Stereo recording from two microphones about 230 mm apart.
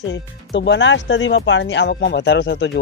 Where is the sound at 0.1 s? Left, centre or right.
Left.